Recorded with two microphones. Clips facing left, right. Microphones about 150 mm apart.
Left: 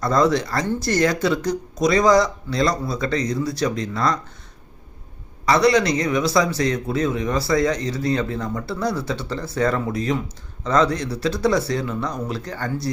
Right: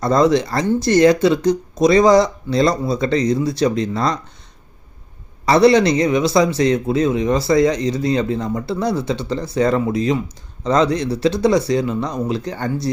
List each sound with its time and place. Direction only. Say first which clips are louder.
0.0 s a man's voice: right 4 dB; 25° right (ahead or behind)
5.5 s a man's voice: right 5 dB; 30° right (ahead or behind)